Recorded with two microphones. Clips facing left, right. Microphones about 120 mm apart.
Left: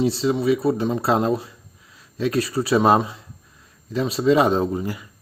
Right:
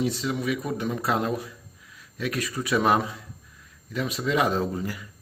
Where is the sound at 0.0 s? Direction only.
30° left (ahead or behind).